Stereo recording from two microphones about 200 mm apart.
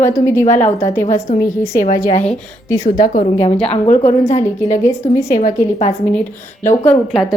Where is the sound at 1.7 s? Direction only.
40° left (ahead or behind).